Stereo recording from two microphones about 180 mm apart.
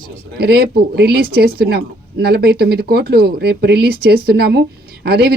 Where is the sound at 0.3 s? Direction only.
60° right (ahead or behind).